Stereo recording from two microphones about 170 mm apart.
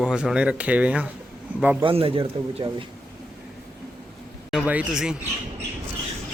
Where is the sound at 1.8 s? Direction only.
30° right (ahead or behind).